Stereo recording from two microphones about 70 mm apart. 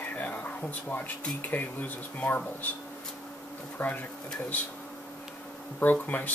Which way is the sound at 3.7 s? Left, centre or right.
Left.